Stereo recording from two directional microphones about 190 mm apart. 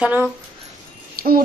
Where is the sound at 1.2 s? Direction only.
50° right (ahead or behind).